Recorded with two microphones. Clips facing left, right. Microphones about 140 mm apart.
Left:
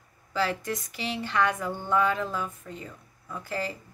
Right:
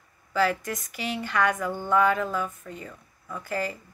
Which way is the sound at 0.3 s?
30° left (ahead or behind).